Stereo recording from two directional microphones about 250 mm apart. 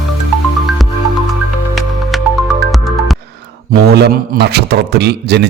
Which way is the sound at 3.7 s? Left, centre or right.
Right.